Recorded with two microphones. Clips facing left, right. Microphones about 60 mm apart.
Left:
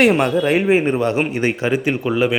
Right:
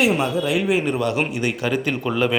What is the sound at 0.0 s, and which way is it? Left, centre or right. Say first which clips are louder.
Speech: left 5 dB; left.